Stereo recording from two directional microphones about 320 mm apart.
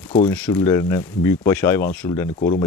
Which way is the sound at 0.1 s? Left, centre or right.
Centre.